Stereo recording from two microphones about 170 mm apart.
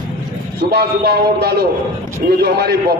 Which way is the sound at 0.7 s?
70° right (ahead or behind).